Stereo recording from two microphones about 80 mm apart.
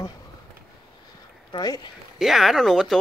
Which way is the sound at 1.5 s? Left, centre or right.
Left.